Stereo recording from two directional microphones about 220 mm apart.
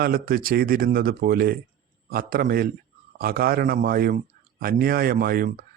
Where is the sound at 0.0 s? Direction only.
40° right (ahead or behind).